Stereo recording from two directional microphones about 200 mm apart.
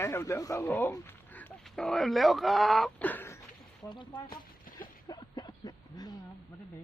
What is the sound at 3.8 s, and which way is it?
Speech, 20° left (ahead or behind).